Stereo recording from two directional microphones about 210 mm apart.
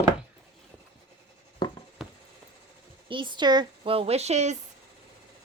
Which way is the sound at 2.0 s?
Centre (ahead or behind).